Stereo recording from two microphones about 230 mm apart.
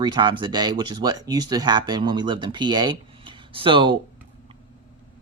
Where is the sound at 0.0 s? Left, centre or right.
Right.